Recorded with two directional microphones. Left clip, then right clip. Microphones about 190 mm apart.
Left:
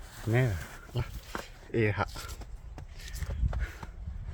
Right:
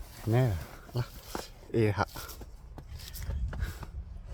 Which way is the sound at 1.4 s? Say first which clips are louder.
Right 1 dB; 20° right (ahead or behind).